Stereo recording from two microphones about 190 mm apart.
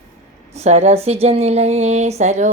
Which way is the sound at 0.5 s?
35° right (ahead or behind).